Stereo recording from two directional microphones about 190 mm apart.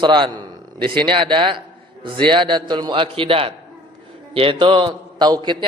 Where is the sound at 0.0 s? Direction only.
25° right (ahead or behind).